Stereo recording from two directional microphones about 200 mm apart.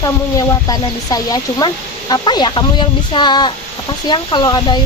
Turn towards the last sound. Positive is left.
turn(degrees=20)  # may be behind; listen again after turning